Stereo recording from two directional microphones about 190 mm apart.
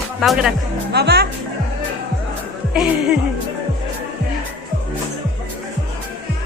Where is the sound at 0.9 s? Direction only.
60° right (ahead or behind).